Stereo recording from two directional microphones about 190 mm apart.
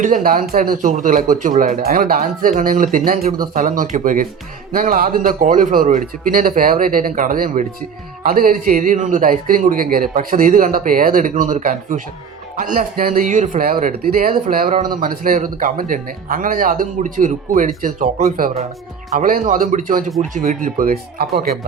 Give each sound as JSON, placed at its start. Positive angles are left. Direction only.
{"t": 0.0, "sound": "speech", "side_deg": -45}